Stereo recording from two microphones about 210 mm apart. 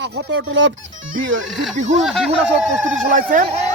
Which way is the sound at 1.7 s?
35° right (ahead or behind).